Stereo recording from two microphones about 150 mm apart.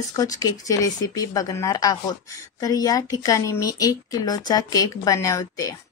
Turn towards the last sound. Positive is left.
turn(degrees=25)  # may be behind; listen again after turning